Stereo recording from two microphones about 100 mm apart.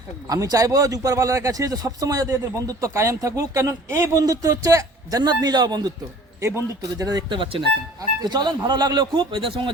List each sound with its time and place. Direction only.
0.3 s speech: 40° right (ahead or behind)
6.4 s a man's voice: 25° right (ahead or behind)
7.0 s speech: 40° right (ahead or behind)
7.3 s speech: 60° right (ahead or behind)
8.2 s speech: 45° right (ahead or behind)